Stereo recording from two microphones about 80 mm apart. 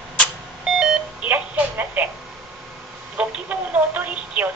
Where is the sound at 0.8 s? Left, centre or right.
Centre.